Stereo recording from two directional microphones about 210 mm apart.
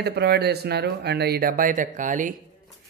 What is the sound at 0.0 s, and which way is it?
Speech, 50° right (ahead or behind).